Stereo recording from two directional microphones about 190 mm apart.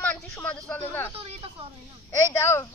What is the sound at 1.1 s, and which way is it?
Speech, 30° right (ahead or behind).